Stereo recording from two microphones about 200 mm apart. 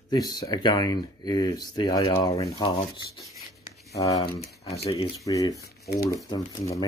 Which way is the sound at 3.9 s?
15° left (ahead or behind).